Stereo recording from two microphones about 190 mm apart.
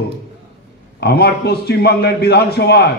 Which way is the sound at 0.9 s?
55° left (ahead or behind).